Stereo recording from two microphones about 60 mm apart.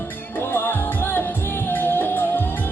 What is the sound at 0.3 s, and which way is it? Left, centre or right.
Music, left.